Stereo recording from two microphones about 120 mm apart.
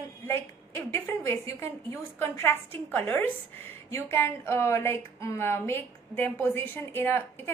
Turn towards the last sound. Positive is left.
turn(degrees=20)  # may be behind; listen again after turning